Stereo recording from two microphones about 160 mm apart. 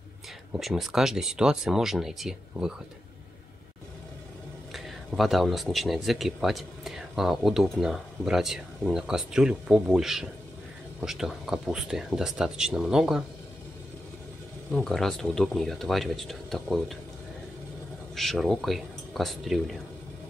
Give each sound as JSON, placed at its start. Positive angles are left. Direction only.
{"t": 0.5, "sound": "speech", "side_deg": 0}
{"t": 4.7, "sound": "speech", "side_deg": 0}
{"t": 14.7, "sound": "speech", "side_deg": 5}
{"t": 18.1, "sound": "speech", "side_deg": 0}